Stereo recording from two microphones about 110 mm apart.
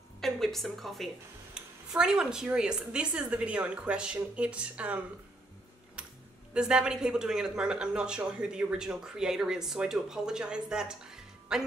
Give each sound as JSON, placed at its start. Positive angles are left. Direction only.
{"t": 0.2, "sound": "speech", "side_deg": 0}
{"t": 6.0, "sound": "a sound", "side_deg": -10}
{"t": 6.5, "sound": "speech", "side_deg": -5}